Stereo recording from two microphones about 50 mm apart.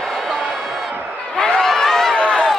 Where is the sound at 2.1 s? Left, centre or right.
Centre.